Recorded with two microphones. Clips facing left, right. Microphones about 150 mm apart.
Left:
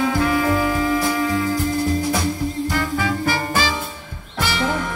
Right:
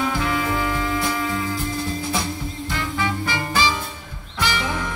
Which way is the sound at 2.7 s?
45° left (ahead or behind).